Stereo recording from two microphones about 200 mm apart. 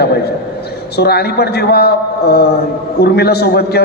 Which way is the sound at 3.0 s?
55° left (ahead or behind).